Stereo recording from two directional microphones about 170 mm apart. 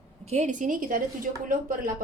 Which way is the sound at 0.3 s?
45° right (ahead or behind).